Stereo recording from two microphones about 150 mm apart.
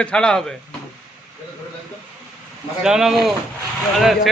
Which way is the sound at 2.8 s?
5° right (ahead or behind).